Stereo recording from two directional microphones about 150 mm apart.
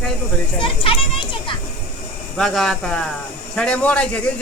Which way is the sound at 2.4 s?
Centre (ahead or behind).